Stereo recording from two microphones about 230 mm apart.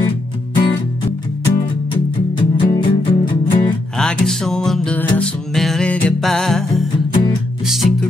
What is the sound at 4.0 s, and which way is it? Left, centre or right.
Music, centre.